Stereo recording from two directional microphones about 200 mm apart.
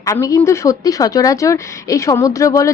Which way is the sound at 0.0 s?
15° left (ahead or behind).